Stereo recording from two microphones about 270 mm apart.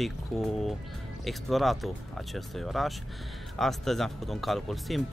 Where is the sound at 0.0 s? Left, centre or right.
Centre.